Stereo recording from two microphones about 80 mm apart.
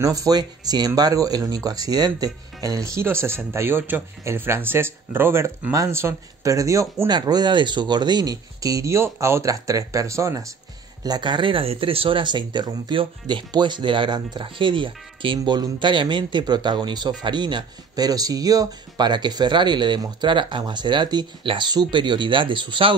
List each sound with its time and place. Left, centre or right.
0.0 s speech: right
7.1 s speech: right
11.1 s speech: right
20.2 s speech: right